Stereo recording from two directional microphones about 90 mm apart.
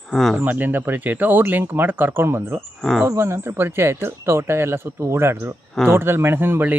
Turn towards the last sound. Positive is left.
turn(degrees=-25)  # may be behind; listen again after turning